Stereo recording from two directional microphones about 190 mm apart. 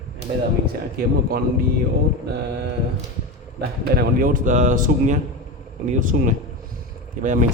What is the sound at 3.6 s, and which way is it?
A man's voice, 55° right (ahead or behind).